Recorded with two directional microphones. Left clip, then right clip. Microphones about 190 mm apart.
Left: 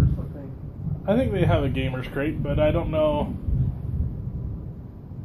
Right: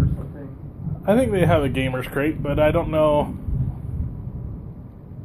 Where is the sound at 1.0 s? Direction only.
55° right (ahead or behind).